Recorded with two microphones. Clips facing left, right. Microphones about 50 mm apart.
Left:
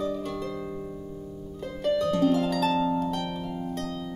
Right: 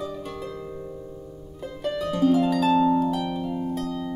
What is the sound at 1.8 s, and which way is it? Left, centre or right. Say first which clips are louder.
Harp: even; centre.